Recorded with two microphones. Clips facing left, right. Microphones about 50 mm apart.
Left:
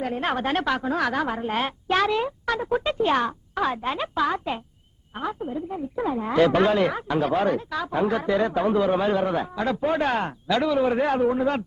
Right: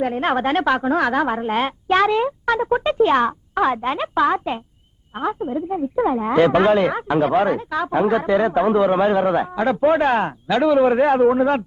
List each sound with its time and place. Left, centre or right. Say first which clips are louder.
0.0 s speech: right 6 dB; right